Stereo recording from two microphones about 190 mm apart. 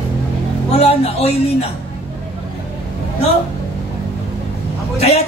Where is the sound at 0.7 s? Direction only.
30° left (ahead or behind).